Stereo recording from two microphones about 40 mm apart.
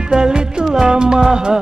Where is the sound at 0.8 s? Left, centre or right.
Right.